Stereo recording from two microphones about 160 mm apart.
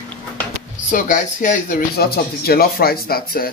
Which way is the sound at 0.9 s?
55° left (ahead or behind).